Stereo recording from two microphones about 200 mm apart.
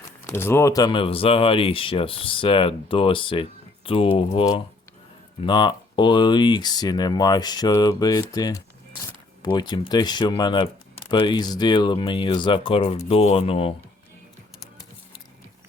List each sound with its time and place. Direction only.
0.3 s speech: 10° left (ahead or behind); by 13.7 s 30° left (ahead or behind)